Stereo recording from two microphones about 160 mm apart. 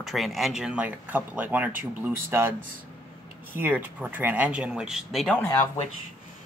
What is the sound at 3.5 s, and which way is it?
Speech, 10° right (ahead or behind).